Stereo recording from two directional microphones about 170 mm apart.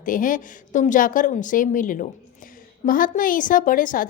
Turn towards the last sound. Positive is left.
turn(degrees=55)  # may be behind; listen again after turning